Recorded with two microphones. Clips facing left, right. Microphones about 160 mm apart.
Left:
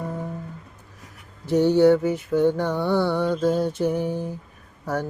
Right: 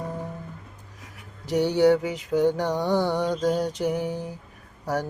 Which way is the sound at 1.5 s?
10° right (ahead or behind).